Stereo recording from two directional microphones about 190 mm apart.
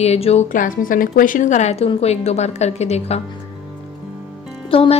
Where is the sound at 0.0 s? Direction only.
35° left (ahead or behind).